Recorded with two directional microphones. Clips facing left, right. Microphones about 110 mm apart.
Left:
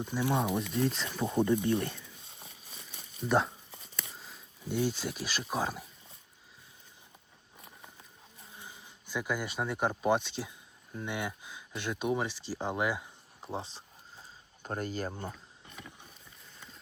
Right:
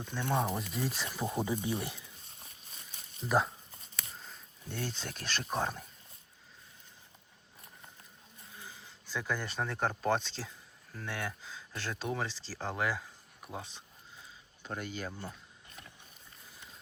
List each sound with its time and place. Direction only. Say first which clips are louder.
0.0 s speech: left 2 dB; 10° left (ahead or behind); by 2.0 s 10° right (ahead or behind)
3.2 s speech: left 2 dB; centre (ahead or behind)
8.5 s speech: even; 20° left (ahead or behind)
13.4 s a sound: left 5 dB; 30° left (ahead or behind)
14.6 s speech: left 4 dB; 40° left (ahead or behind)